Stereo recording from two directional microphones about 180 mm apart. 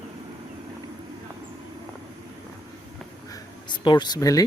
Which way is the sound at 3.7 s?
25° left (ahead or behind).